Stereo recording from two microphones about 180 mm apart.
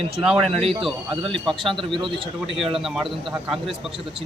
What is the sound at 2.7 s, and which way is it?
Speech, centre (ahead or behind).